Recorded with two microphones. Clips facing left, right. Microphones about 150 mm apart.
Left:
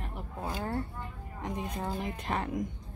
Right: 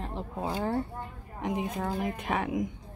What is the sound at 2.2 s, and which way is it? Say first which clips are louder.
Speech: right 3 dB; 5° right (ahead or behind).